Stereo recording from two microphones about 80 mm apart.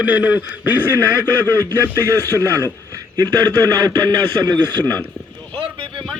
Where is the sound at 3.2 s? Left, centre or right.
Right.